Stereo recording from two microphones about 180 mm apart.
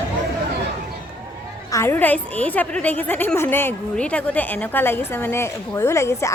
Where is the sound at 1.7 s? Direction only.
15° left (ahead or behind).